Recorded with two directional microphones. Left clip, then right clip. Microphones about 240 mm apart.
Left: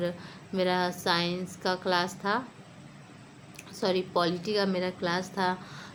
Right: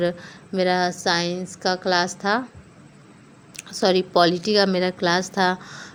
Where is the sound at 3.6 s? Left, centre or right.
Right.